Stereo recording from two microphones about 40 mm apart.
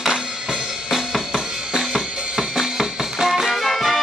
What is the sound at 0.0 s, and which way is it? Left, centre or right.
Drum, centre.